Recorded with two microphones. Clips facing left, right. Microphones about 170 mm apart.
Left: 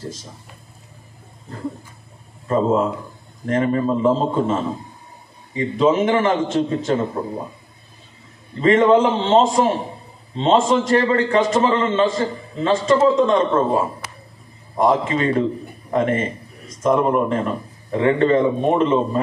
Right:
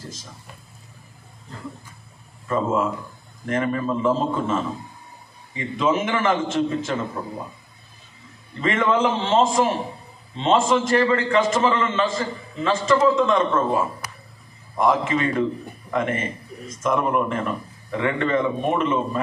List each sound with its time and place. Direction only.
2.4 s a man's voice: 35° left (ahead or behind)
8.5 s a man's voice: 35° left (ahead or behind)
14.8 s a man's voice: 35° left (ahead or behind)